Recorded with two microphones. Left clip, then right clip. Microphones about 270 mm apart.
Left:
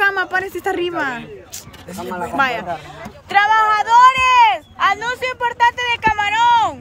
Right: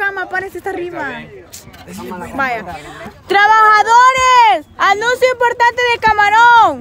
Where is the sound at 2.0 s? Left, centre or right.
Left.